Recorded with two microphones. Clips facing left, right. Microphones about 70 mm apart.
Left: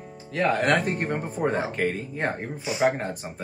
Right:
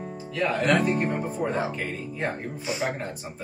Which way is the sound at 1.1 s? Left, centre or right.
Left.